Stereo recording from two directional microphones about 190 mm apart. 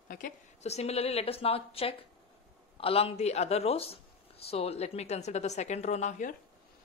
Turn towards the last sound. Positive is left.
turn(degrees=40)  # may be behind; listen again after turning